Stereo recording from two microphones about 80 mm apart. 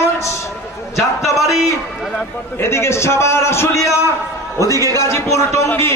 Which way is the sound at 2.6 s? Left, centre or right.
Left.